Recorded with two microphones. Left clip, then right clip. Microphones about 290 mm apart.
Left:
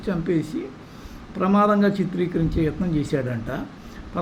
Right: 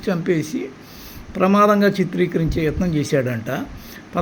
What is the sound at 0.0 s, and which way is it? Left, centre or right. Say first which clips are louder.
A man's voice: right 4 dB; right.